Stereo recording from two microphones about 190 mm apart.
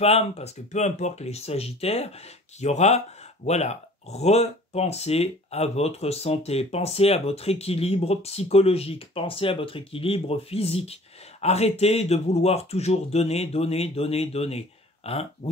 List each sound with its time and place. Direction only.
0.0 s speech: 35° left (ahead or behind)